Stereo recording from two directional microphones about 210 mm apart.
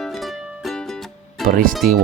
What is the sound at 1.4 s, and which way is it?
Speech, 40° right (ahead or behind).